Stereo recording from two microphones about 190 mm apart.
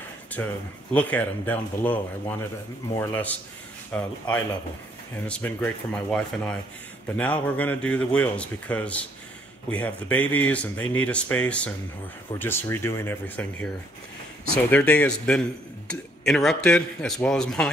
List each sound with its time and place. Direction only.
0.4 s speech: 15° left (ahead or behind)
5.2 s speech: 10° left (ahead or behind)
14.7 s a man's voice: 5° left (ahead or behind)